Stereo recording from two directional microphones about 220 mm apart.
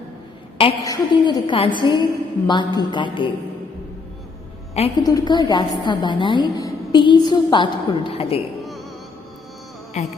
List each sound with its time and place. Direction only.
0.6 s a woman's voice: 20° left (ahead or behind)
4.7 s a woman's voice: 25° left (ahead or behind)
10.0 s music: 35° left (ahead or behind)